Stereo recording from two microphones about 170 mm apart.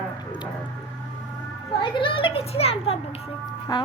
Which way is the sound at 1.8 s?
30° left (ahead or behind).